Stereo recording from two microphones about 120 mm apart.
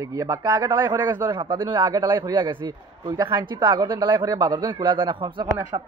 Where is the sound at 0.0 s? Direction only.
25° right (ahead or behind).